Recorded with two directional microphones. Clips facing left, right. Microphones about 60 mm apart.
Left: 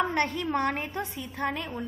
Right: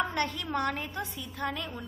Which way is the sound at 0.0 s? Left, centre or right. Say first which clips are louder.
Left 4 dB; left.